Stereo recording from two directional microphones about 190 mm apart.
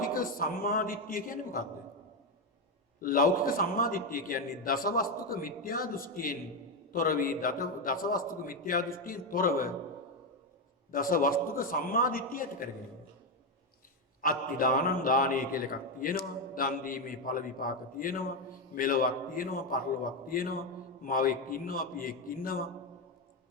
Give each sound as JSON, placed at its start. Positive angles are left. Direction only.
{"t": 0.0, "sound": "a man's voice", "side_deg": 50}
{"t": 3.0, "sound": "a man's voice", "side_deg": 50}
{"t": 10.9, "sound": "a man's voice", "side_deg": 45}
{"t": 14.2, "sound": "a man's voice", "side_deg": 45}